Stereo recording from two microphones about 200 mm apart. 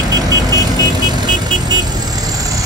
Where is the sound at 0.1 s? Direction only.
20° right (ahead or behind).